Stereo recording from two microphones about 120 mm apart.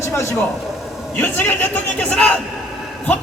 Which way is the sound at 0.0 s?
20° left (ahead or behind).